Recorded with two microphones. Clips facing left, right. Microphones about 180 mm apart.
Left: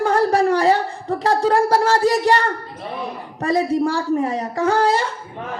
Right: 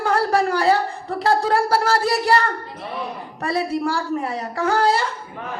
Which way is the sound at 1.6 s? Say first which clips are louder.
Left 3 dB; 35° left (ahead or behind).